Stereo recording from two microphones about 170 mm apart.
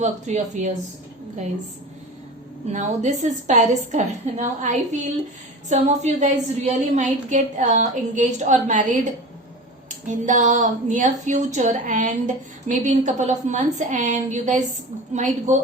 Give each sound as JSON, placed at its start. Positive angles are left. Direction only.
{"t": 0.0, "sound": "a woman's voice", "side_deg": -45}
{"t": 2.7, "sound": "a woman's voice", "side_deg": -45}